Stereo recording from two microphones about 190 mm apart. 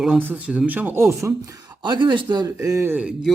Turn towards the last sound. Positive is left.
turn(degrees=-5)  # may be behind; listen again after turning